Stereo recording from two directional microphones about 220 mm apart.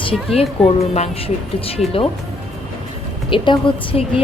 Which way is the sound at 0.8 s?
30° left (ahead or behind).